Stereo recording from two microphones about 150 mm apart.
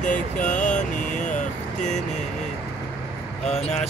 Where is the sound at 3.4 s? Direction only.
45° left (ahead or behind).